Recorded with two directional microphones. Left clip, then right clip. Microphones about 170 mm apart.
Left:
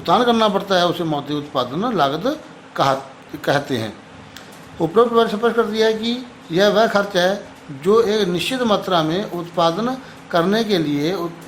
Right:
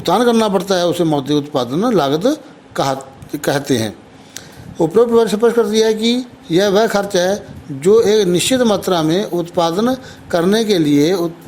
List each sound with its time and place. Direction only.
0.0 s a man's voice: 45° right (ahead or behind)